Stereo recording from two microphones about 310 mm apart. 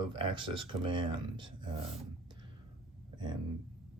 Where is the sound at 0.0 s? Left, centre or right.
Centre.